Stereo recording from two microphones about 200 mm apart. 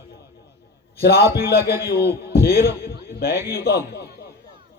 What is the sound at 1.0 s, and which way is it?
A man's voice, 50° left (ahead or behind).